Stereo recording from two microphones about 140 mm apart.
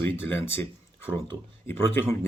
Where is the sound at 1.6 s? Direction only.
15° left (ahead or behind).